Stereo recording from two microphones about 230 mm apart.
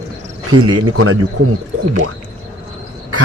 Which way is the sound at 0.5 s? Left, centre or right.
Right.